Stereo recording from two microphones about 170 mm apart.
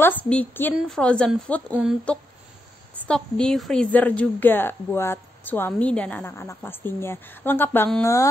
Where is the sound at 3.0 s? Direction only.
5° left (ahead or behind).